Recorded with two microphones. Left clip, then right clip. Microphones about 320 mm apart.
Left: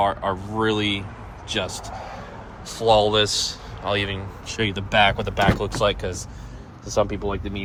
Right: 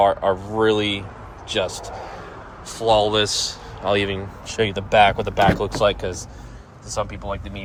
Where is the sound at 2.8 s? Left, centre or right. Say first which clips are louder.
Even; centre.